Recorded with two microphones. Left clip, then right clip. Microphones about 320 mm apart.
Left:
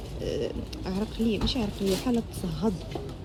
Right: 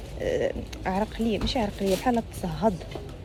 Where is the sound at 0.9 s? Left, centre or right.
Centre.